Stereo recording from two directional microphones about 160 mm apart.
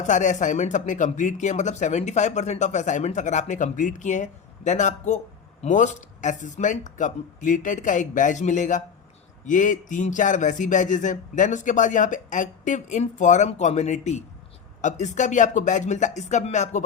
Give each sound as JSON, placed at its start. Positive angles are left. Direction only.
{"t": 0.0, "sound": "speech", "side_deg": 50}